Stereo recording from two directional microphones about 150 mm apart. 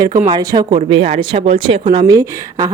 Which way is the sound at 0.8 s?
40° right (ahead or behind).